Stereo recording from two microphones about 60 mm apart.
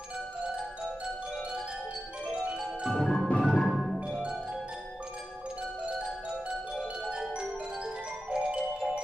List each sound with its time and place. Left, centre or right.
2.9 s music: centre
7.1 s marimba: centre
8.3 s music: centre